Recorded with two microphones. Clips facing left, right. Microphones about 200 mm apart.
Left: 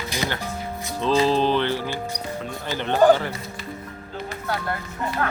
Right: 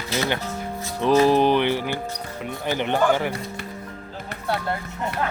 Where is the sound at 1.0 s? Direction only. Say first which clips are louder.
Right 3 dB; 15° right (ahead or behind).